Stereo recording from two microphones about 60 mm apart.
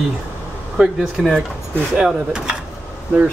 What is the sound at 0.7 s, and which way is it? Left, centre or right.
Speech, centre.